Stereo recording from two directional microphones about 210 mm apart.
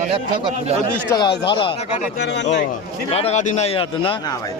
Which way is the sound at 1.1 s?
20° left (ahead or behind).